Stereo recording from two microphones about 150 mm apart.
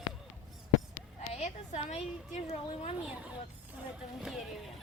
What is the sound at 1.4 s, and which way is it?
A woman's voice, 45° left (ahead or behind).